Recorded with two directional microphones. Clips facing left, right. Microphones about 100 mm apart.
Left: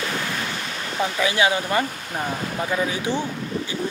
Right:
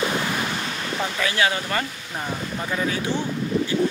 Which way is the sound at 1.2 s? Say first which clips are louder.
Left 3 dB; 20° left (ahead or behind).